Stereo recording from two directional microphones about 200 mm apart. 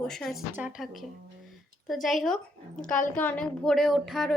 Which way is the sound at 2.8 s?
40° left (ahead or behind).